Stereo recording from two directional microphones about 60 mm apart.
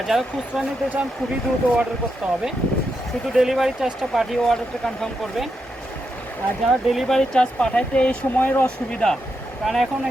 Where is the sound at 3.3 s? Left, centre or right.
Centre.